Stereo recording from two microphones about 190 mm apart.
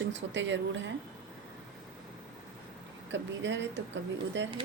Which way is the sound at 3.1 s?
70° right (ahead or behind).